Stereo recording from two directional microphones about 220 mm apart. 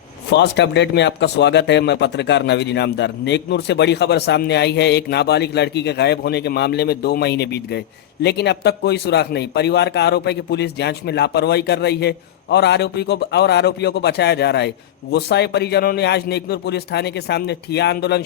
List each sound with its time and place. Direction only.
0.3 s speech: 50° left (ahead or behind)